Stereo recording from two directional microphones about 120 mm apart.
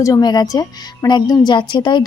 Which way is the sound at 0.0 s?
30° left (ahead or behind).